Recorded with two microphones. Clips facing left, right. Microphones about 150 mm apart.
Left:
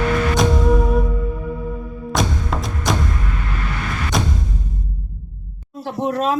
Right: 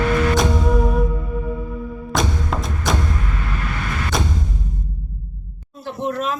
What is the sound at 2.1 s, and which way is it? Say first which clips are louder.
Music: left 1 dB; centre (ahead or behind).